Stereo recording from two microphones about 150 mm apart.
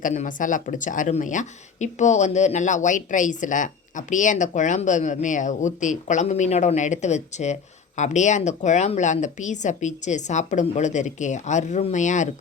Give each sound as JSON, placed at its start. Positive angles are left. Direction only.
{"t": 0.0, "sound": "speech", "side_deg": 55}